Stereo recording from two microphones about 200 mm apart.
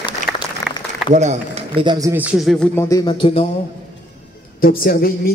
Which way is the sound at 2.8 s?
15° left (ahead or behind).